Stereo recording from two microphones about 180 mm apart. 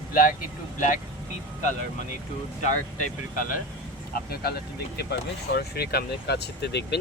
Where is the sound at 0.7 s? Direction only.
45° left (ahead or behind).